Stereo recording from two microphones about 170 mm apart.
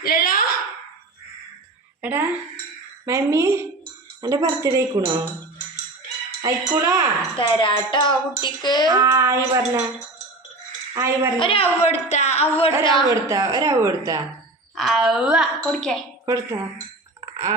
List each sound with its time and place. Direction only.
0.0 s a sound: 60° left (ahead or behind)
2.0 s a woman's voice: 10° right (ahead or behind)
3.1 s child singing: 15° right (ahead or behind)
4.2 s speech: 20° right (ahead or behind)
6.4 s child singing: 20° right (ahead or behind)
7.3 s speech: 30° left (ahead or behind)
8.9 s child singing: 20° right (ahead or behind)
10.9 s child singing: 15° right (ahead or behind)
11.3 s a woman's voice: 30° left (ahead or behind)
13.1 s speech: 20° right (ahead or behind)
14.8 s a woman's voice: centre (ahead or behind)
16.2 s speech: 20° right (ahead or behind)
17.2 s chink: 20° right (ahead or behind)